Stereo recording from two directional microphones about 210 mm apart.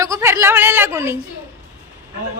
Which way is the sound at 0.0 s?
15° right (ahead or behind).